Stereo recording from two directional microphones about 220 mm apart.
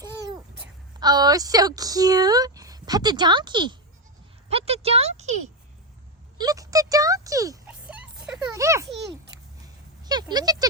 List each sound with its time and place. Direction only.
0.0 s babbling: 15° right (ahead or behind)
0.9 s a woman's voice: 20° right (ahead or behind)
6.4 s a sound: 15° right (ahead or behind)
10.0 s a woman's voice: 20° right (ahead or behind)